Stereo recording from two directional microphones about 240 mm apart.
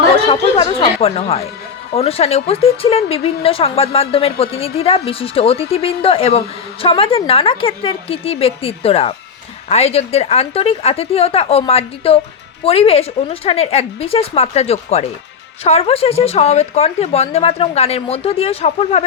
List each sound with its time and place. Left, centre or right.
0.3 s a woman's voice: left